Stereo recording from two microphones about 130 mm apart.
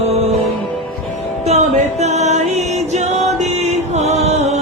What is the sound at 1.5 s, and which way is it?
Music, 55° right (ahead or behind).